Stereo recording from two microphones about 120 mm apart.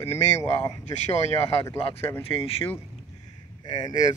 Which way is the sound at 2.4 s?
50° left (ahead or behind).